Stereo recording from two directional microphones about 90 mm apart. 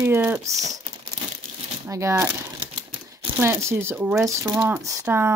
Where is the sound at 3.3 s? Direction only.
25° right (ahead or behind).